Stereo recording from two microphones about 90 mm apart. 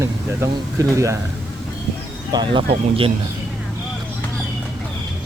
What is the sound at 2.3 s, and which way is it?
Speech, 60° right (ahead or behind).